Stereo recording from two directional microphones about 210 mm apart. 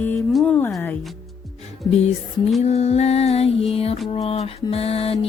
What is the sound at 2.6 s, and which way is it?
Music, 30° left (ahead or behind).